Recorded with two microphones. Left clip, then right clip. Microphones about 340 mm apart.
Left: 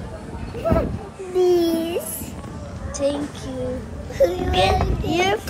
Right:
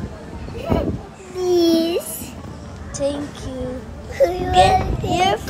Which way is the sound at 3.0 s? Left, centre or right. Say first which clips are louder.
Even; centre.